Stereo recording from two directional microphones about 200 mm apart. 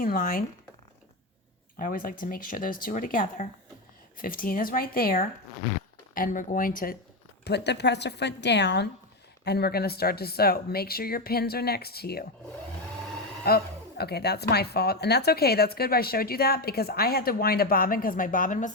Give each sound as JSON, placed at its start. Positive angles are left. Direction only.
{"t": 0.0, "sound": "a woman's voice", "side_deg": 45}
{"t": 1.7, "sound": "a woman's voice", "side_deg": 45}
{"t": 7.4, "sound": "a woman's voice", "side_deg": 60}
{"t": 13.5, "sound": "a woman's voice", "side_deg": 50}